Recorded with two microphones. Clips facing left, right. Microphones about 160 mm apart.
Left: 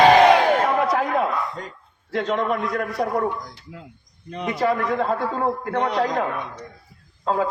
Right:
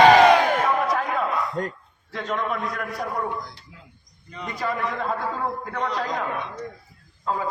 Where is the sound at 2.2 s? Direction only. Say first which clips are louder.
Left 3 dB; 35° left (ahead or behind).